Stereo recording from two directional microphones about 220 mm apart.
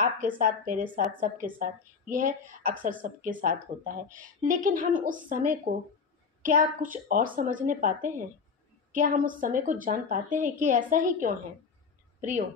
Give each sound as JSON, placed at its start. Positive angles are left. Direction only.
{"t": 0.4, "sound": "a woman's voice", "side_deg": -35}